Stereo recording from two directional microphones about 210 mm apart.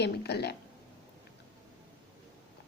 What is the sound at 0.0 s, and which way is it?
Speech, 50° left (ahead or behind).